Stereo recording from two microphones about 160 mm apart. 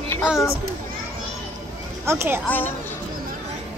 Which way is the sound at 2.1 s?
15° right (ahead or behind).